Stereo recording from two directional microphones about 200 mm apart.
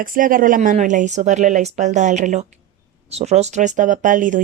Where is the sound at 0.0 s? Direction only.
45° right (ahead or behind).